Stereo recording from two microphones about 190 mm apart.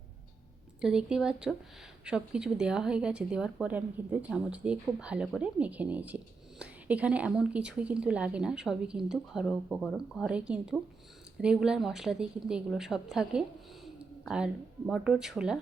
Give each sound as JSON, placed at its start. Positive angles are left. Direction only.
{"t": 0.8, "sound": "speech", "side_deg": -5}